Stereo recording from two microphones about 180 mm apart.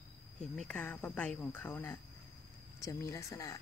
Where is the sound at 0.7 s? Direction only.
10° left (ahead or behind).